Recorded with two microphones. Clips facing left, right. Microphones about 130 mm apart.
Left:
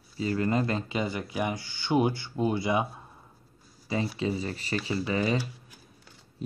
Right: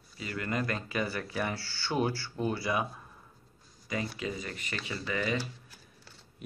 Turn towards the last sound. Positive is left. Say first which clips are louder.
# left 5 dB
turn(degrees=35)  # may be behind; listen again after turning